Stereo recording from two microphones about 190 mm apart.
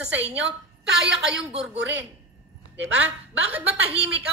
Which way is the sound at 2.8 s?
5° right (ahead or behind).